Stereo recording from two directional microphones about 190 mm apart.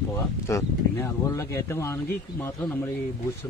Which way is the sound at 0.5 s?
15° left (ahead or behind).